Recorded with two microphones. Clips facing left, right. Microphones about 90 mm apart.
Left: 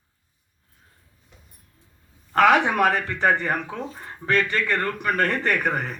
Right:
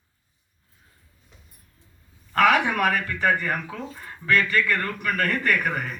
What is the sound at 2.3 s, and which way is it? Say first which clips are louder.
A man's voice: left 2 dB; 30° left (ahead or behind).